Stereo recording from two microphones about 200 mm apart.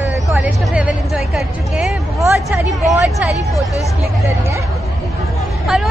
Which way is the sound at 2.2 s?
15° right (ahead or behind).